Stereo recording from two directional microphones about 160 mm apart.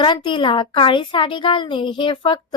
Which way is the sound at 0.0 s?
30° left (ahead or behind).